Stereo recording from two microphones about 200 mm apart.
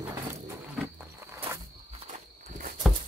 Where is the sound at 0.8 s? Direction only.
15° right (ahead or behind).